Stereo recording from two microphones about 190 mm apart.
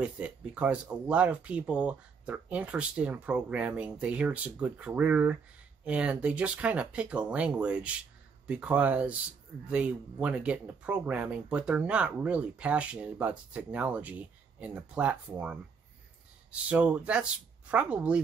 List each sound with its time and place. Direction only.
0.0 s speech: 5° right (ahead or behind)
16.6 s speech: 5° right (ahead or behind)